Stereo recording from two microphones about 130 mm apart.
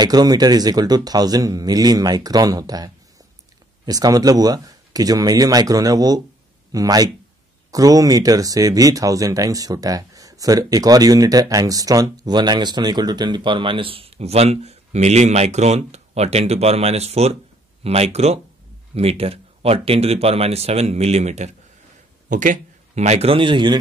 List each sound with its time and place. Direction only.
0.0 s speech: 30° right (ahead or behind); by 21.5 s 60° right (ahead or behind)
22.3 s a man's voice: 80° right; by 23.8 s 35° right (ahead or behind)